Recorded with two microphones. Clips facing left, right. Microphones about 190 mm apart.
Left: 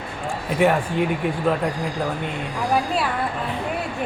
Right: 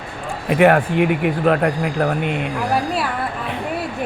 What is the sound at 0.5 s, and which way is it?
Speech, 65° right (ahead or behind).